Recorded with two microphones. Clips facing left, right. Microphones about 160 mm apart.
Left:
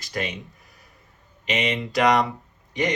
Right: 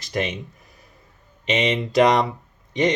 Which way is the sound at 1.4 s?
20° right (ahead or behind).